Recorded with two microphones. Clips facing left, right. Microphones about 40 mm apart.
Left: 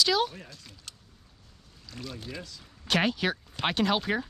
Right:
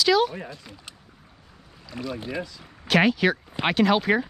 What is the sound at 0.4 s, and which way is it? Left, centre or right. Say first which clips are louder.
Speech: right 9 dB; centre.